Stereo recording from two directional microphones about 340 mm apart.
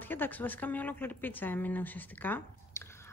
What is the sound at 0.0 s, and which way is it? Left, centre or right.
Speech, centre.